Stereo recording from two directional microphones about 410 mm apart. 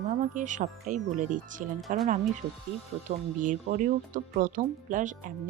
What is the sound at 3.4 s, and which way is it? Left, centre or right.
Speech, centre.